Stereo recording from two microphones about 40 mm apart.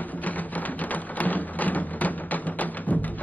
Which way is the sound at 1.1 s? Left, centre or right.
Left.